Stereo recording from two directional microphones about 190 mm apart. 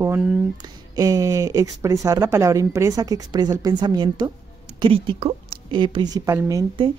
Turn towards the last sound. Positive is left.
turn(degrees=-15)  # may be behind; listen again after turning